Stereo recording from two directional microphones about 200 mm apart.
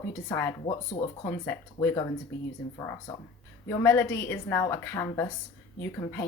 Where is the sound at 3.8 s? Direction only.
10° left (ahead or behind).